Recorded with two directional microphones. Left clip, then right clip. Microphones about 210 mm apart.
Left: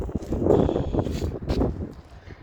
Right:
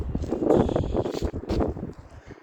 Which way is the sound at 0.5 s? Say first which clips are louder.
Left 1 dB; 5° right (ahead or behind).